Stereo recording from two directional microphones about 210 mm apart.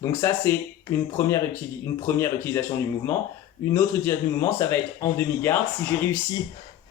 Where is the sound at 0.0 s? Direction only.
10° left (ahead or behind).